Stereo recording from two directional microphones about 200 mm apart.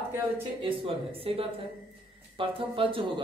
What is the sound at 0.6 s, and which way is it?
Speech, 25° right (ahead or behind).